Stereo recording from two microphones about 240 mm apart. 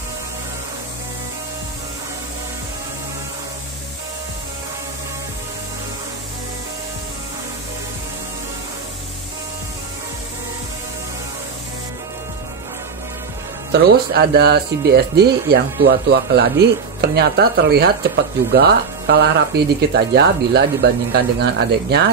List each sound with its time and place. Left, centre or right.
13.7 s speech: right